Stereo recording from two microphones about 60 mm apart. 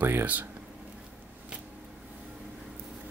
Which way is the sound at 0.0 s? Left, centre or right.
Right.